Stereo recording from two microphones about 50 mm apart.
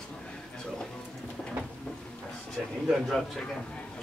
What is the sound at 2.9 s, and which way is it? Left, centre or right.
Speech, centre.